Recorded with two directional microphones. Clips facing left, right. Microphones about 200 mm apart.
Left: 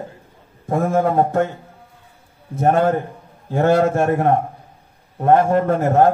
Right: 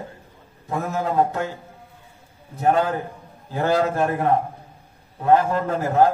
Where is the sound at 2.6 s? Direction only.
50° left (ahead or behind).